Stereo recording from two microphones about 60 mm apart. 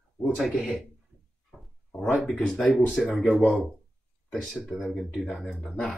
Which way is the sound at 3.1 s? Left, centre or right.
Centre.